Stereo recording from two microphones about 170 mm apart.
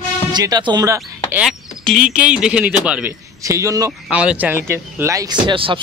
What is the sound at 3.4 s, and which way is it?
Speech, 20° right (ahead or behind).